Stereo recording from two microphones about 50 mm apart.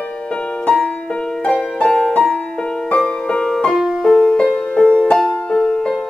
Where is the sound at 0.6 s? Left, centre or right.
Centre.